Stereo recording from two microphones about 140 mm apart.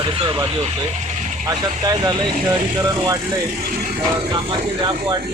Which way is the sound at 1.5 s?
25° right (ahead or behind).